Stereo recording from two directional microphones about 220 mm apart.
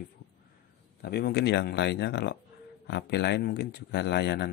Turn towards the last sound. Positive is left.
turn(degrees=50)  # may be behind; listen again after turning